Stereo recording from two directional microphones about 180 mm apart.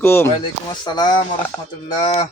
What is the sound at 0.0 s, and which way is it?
Speech, 15° left (ahead or behind).